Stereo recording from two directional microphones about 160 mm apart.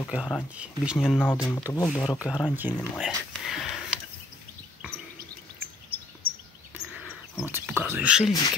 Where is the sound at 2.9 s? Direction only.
Centre (ahead or behind).